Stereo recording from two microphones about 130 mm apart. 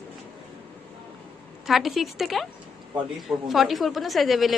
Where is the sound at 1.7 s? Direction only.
Centre (ahead or behind).